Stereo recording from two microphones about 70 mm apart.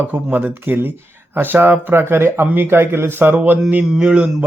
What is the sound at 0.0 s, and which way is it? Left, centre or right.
A man's voice, right.